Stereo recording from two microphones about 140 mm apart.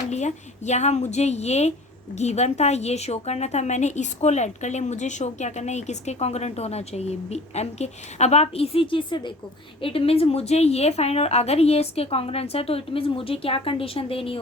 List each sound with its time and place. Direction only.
0.1 s a woman's voice: 55° left (ahead or behind)